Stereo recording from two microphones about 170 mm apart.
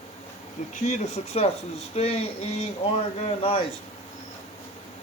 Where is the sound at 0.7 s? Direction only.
45° left (ahead or behind).